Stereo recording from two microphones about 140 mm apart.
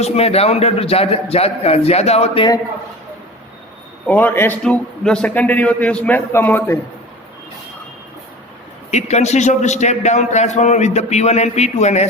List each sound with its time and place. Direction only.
0.0 s a man's voice: 50° left (ahead or behind)
4.0 s a man's voice: 10° left (ahead or behind)
8.9 s a man's voice: 55° left (ahead or behind)